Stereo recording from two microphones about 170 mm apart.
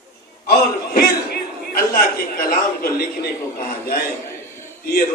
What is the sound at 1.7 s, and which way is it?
A man's voice, 60° left (ahead or behind).